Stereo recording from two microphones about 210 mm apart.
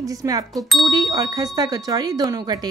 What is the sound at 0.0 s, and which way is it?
Speech, 15° right (ahead or behind).